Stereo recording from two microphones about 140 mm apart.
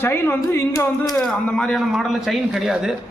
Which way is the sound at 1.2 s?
5° left (ahead or behind).